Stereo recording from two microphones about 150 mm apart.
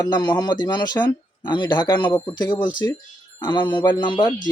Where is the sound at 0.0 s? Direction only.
30° left (ahead or behind).